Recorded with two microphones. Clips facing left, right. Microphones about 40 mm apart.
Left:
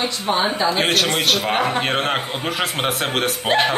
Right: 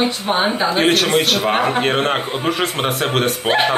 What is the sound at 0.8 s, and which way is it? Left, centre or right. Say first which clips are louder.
A man's voice: right 4 dB; centre.